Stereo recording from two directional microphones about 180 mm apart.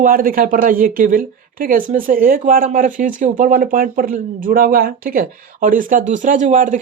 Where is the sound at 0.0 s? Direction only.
50° right (ahead or behind).